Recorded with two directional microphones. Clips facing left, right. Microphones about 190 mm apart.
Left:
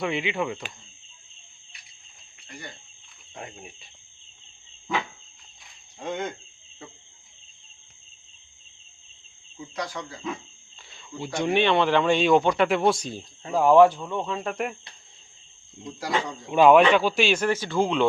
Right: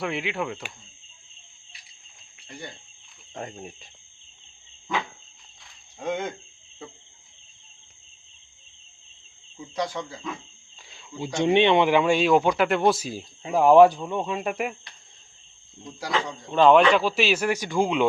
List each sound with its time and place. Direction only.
0.0 s speech: centre (ahead or behind)
3.3 s speech: 40° right (ahead or behind)
9.8 s speech: 25° right (ahead or behind)
10.8 s speech: 15° right (ahead or behind)
15.8 s speech: centre (ahead or behind)
16.1 s speech: 10° left (ahead or behind); by 18.1 s 10° right (ahead or behind)